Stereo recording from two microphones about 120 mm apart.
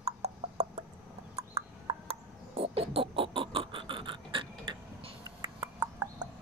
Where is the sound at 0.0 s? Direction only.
60° right (ahead or behind); by 5.5 s 45° right (ahead or behind).